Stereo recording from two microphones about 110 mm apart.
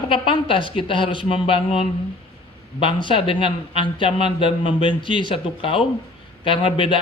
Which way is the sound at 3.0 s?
50° left (ahead or behind).